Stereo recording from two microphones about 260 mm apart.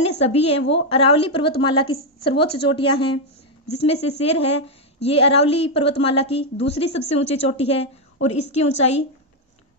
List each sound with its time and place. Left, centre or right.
0.2 s a woman's voice: left